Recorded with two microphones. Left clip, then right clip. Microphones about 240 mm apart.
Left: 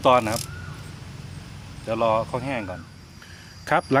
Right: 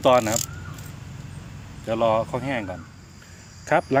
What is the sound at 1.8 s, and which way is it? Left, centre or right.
Speech, centre.